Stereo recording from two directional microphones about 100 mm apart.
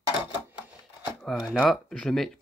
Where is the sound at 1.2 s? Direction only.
5° right (ahead or behind).